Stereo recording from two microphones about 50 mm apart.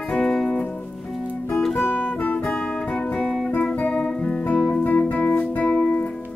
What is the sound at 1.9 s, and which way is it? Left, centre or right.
Guitar, left.